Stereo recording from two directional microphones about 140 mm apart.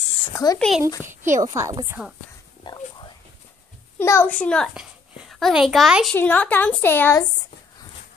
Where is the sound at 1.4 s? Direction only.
25° right (ahead or behind).